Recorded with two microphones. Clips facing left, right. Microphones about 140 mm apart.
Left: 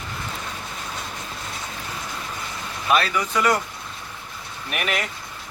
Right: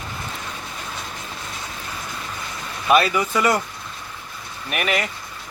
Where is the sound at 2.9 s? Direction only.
10° right (ahead or behind).